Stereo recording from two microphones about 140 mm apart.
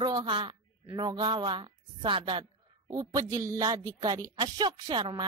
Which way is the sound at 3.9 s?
25° right (ahead or behind).